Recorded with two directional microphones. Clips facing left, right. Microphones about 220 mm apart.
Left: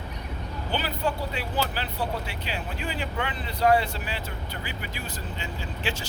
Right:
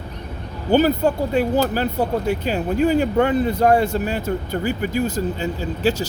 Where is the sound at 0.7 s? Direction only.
45° right (ahead or behind).